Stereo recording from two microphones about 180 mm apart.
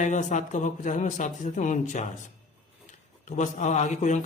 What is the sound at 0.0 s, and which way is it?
Speech, 45° left (ahead or behind).